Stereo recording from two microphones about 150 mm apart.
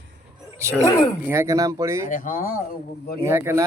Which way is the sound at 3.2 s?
15° right (ahead or behind).